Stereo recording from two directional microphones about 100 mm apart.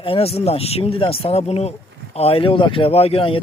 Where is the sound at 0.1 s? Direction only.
85° left.